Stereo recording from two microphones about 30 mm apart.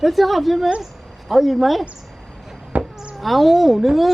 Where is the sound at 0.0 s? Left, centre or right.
Centre.